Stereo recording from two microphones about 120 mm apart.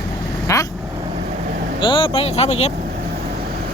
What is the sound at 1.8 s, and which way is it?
Speech, 45° left (ahead or behind).